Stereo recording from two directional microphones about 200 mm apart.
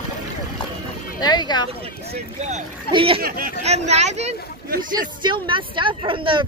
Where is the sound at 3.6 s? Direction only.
35° right (ahead or behind).